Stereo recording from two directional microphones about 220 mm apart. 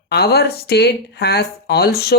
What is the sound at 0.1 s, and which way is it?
Speech, 45° left (ahead or behind).